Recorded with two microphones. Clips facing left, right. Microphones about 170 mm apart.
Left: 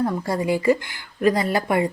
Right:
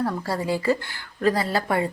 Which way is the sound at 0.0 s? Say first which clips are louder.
Left 3 dB; 20° left (ahead or behind).